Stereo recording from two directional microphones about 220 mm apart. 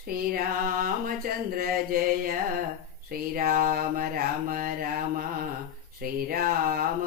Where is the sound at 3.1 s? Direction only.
40° right (ahead or behind).